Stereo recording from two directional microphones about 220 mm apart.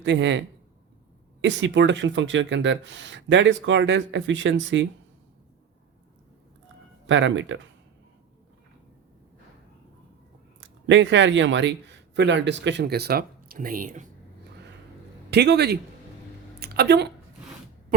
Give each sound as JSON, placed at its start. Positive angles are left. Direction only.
{"t": 0.0, "sound": "a man's voice", "side_deg": -55}
{"t": 7.1, "sound": "speech", "side_deg": -55}
{"t": 10.6, "sound": "speech", "side_deg": -55}
{"t": 15.3, "sound": "a man's voice", "side_deg": -50}
{"t": 16.6, "sound": "a sound", "side_deg": -45}